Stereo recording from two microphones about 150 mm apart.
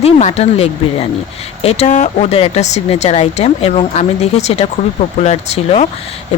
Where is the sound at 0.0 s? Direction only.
50° left (ahead or behind).